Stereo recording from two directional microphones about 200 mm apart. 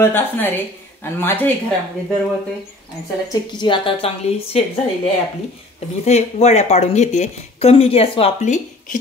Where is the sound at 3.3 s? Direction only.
25° left (ahead or behind).